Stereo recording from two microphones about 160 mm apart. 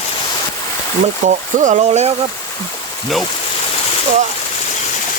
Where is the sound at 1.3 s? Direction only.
50° right (ahead or behind).